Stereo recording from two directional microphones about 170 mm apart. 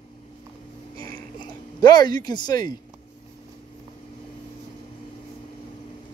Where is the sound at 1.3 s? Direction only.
25° left (ahead or behind).